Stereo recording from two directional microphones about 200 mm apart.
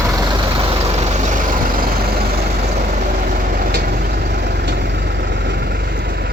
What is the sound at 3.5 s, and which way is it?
Vehicle, 45° right (ahead or behind).